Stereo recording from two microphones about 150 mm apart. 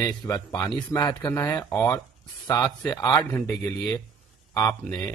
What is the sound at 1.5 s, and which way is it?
Speech, 15° left (ahead or behind).